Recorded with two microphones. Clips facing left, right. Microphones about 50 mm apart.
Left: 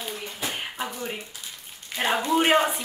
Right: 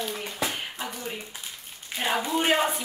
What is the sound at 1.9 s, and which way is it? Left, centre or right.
Speech, left.